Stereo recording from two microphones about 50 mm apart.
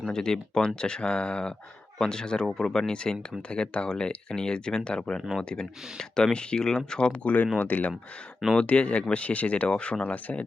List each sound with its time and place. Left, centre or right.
0.1 s speech: centre; by 10.4 s left